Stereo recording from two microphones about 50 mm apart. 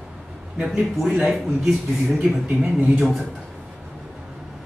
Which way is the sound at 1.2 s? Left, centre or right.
Centre.